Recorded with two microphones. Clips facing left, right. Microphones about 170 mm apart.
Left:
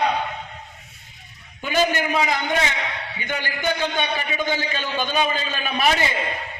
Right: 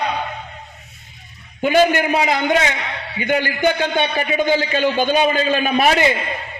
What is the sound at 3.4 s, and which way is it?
A man's voice, 50° right (ahead or behind).